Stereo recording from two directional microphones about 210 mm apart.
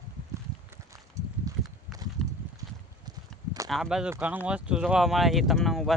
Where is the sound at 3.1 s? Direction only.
20° right (ahead or behind).